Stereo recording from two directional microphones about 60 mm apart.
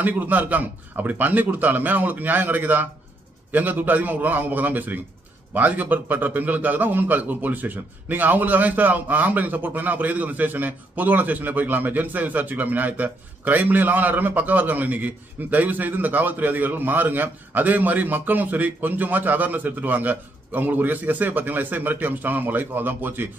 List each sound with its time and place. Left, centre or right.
0.0 s a man's voice: right